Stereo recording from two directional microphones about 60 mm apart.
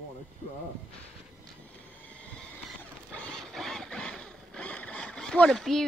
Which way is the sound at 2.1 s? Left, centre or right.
Left.